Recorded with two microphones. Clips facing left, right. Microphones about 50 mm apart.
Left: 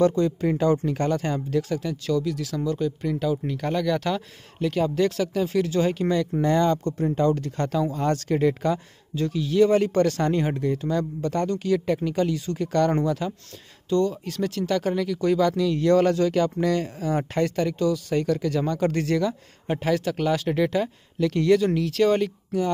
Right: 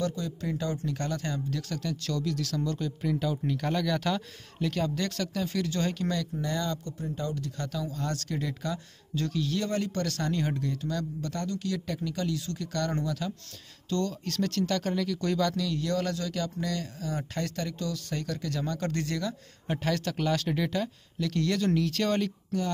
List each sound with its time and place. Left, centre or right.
0.0 s speech: left; by 6.2 s centre
6.4 s speech: left
9.1 s speech: centre
9.8 s speech: left
13.8 s speech: centre
21.5 s speech: centre